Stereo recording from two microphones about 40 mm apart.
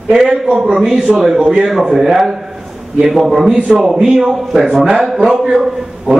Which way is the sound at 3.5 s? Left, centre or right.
Right.